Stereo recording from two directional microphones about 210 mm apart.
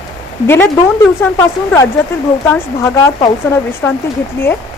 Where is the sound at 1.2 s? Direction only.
15° left (ahead or behind).